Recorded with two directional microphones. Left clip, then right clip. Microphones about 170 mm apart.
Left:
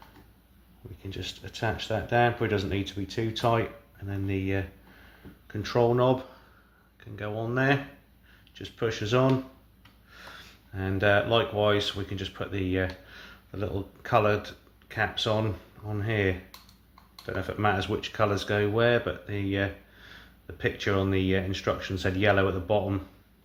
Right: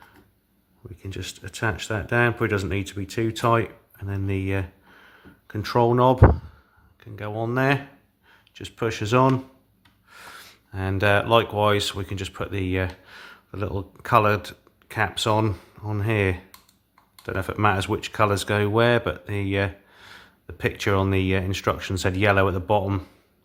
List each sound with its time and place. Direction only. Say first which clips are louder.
1.1 s speech: right 2 dB; 50° right (ahead or behind)
7.0 s speech: right 4 dB; 35° right (ahead or behind); by 23.0 s 50° right (ahead or behind)